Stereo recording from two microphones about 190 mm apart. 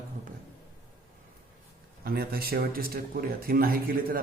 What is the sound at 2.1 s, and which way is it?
Speech, 55° right (ahead or behind).